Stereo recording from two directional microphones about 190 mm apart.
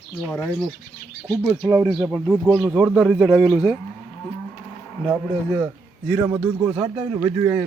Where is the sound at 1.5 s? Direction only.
20° right (ahead or behind).